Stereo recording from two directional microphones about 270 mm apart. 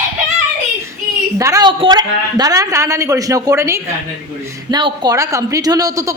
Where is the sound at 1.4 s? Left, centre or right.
Centre.